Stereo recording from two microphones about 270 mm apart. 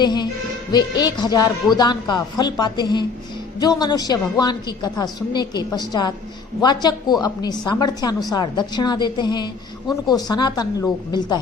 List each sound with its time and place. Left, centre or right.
0.0 s a man's voice: centre